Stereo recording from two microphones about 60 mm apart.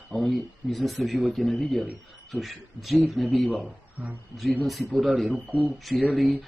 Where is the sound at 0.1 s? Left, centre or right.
Centre.